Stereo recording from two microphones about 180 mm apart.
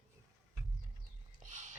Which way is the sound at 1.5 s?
45° right (ahead or behind).